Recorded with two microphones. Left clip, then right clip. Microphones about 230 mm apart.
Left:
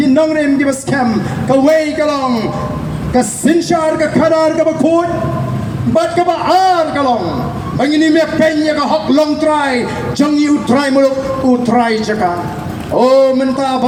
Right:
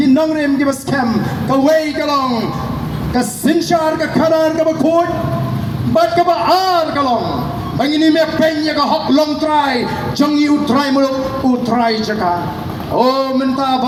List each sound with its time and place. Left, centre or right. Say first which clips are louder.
0.0 s a man's voice: left 2 dB; left
5.9 s a man's voice: even; left